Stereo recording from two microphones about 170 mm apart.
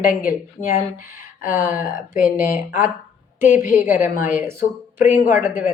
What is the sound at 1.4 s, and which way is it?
Speech, 55° left (ahead or behind).